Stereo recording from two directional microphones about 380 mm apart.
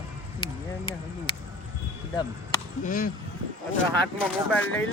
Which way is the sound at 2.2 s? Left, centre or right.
Centre.